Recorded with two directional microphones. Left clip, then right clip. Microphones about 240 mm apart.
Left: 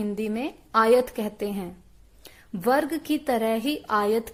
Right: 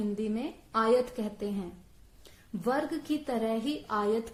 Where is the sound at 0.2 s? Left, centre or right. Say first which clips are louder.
Left 5 dB; left.